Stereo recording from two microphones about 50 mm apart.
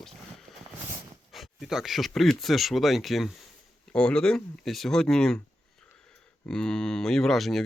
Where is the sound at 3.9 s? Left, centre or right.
Centre.